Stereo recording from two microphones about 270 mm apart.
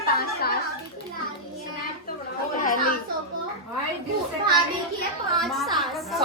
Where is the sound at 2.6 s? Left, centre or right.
Left.